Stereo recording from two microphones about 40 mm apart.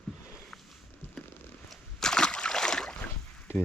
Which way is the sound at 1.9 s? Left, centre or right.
Centre.